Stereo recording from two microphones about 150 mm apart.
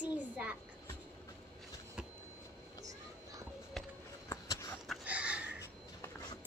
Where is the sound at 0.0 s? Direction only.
10° right (ahead or behind).